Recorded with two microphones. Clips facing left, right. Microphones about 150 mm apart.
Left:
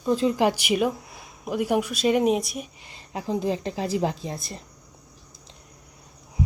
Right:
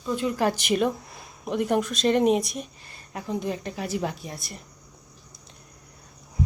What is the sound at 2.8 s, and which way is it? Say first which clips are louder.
A woman's voice: left 3 dB; 20° left (ahead or behind).